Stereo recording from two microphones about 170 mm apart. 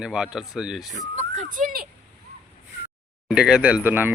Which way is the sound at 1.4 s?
50° right (ahead or behind).